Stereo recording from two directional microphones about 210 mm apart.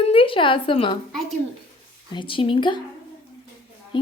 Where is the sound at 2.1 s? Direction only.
25° left (ahead or behind).